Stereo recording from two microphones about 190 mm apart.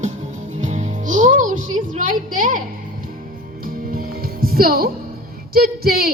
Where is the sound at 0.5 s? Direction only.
40° right (ahead or behind).